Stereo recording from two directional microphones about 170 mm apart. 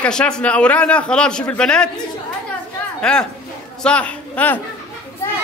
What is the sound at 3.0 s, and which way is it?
A man's voice, 5° left (ahead or behind).